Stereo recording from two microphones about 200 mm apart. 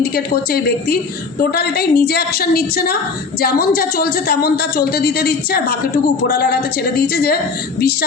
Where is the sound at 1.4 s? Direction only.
50° left (ahead or behind).